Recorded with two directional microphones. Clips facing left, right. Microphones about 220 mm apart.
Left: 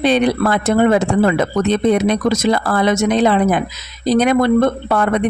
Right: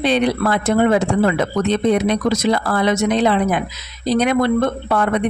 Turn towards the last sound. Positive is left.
turn(degrees=45)  # may be behind; listen again after turning